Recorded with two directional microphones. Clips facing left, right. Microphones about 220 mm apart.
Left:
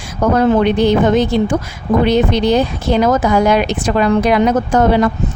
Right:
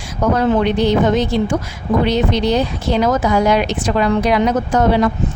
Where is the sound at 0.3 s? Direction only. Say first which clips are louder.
Left 4 dB; 50° left (ahead or behind).